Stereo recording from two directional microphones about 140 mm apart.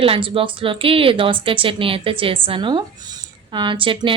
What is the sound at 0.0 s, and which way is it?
A woman's voice, 40° right (ahead or behind).